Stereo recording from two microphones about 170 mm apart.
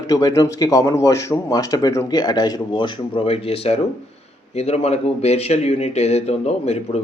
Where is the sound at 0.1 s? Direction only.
20° left (ahead or behind).